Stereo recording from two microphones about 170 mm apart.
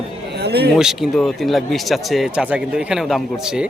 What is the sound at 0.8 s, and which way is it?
A man's voice, 5° right (ahead or behind).